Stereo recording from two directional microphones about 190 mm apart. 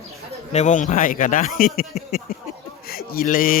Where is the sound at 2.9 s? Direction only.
50° left (ahead or behind).